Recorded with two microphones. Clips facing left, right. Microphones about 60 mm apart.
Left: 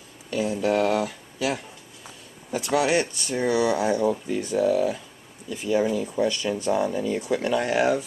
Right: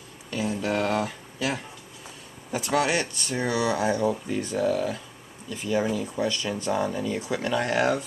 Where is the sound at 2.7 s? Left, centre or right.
Centre.